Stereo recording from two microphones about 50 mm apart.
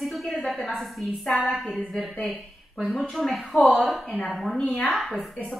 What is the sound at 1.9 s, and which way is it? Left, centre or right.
Speech, centre.